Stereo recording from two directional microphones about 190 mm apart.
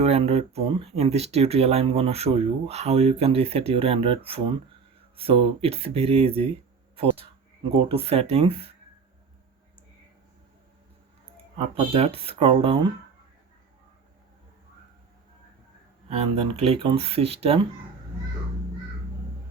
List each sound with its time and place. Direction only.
0.0 s speech: 30° right (ahead or behind)
11.5 s speech: 30° right (ahead or behind)
16.0 s speech: 30° right (ahead or behind)